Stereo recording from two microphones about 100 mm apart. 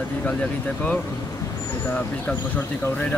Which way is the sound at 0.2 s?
15° left (ahead or behind).